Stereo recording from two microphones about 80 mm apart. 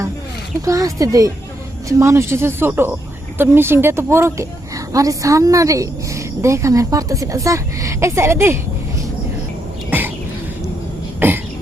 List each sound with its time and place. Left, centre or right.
0.6 s a woman's voice: right
9.9 s bird: right
11.2 s cough: right